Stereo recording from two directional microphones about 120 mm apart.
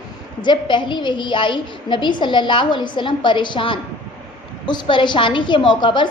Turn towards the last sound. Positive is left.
turn(degrees=40)  # may be behind; listen again after turning